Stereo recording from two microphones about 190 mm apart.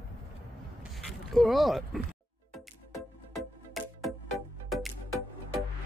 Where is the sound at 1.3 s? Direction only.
Centre (ahead or behind).